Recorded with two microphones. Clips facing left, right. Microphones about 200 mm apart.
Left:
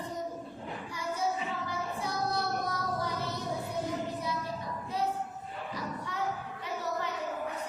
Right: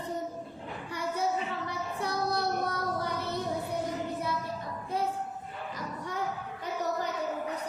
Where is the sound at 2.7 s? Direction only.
60° right (ahead or behind).